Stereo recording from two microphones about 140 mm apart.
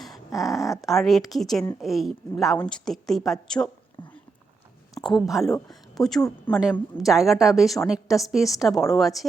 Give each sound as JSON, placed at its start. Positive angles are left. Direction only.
{"t": 0.3, "sound": "a woman's voice", "side_deg": 0}
{"t": 5.0, "sound": "a woman's voice", "side_deg": 0}